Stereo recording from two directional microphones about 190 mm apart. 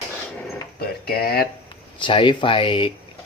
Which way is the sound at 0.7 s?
55° left (ahead or behind).